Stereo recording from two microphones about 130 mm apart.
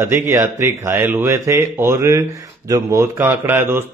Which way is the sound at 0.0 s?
20° right (ahead or behind).